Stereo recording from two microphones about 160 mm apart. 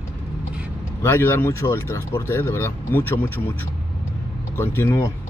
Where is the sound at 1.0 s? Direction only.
15° left (ahead or behind).